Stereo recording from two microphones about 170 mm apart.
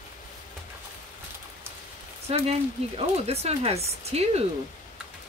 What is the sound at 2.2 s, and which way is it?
Speech, 35° right (ahead or behind).